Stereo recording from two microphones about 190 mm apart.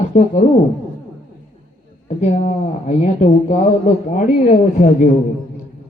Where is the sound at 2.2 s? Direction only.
35° left (ahead or behind).